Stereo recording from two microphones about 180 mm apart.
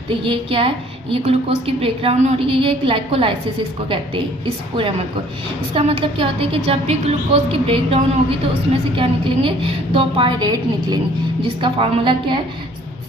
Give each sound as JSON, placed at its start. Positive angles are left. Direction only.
{"t": 0.1, "sound": "a woman's voice", "side_deg": -30}